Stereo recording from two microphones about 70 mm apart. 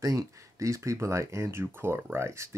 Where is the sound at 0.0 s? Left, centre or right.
Right.